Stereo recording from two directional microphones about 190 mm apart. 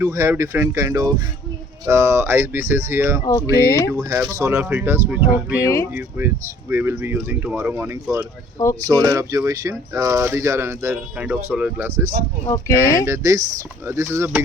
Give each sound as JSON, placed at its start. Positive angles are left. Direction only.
{"t": 0.0, "sound": "speech", "side_deg": -15}
{"t": 3.2, "sound": "speech", "side_deg": 15}
{"t": 3.8, "sound": "speech", "side_deg": -15}
{"t": 5.6, "sound": "speech", "side_deg": 15}
{"t": 5.9, "sound": "speech", "side_deg": -10}
{"t": 12.5, "sound": "speech", "side_deg": 15}
{"t": 13.1, "sound": "speech", "side_deg": -20}